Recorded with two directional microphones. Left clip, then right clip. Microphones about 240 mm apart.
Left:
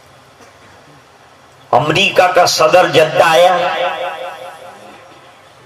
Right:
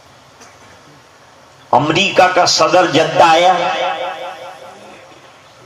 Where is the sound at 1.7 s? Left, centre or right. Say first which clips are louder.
Left 1 dB; left.